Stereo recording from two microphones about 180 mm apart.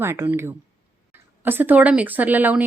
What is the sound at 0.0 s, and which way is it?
Speech, 15° right (ahead or behind).